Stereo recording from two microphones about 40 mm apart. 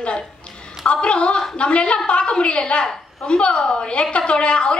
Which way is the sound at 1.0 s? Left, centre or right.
Left.